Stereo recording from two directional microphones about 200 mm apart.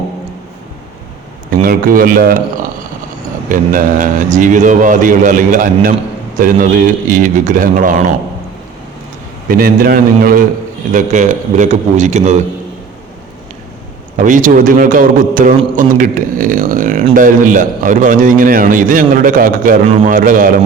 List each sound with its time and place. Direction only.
1.6 s a man's voice: 45° right (ahead or behind)
9.5 s a man's voice: 45° right (ahead or behind)
14.2 s a man's voice: 40° right (ahead or behind)
19.8 s a man's voice: 30° right (ahead or behind)
20.1 s a man's voice: 45° right (ahead or behind)